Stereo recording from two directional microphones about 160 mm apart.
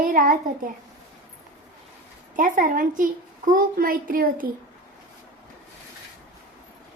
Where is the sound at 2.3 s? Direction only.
55° right (ahead or behind).